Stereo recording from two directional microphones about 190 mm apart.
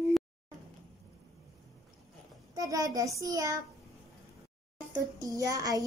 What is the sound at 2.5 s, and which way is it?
A child's voice, 20° right (ahead or behind).